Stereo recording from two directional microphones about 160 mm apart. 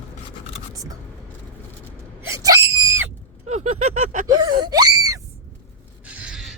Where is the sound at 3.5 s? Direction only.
45° right (ahead or behind).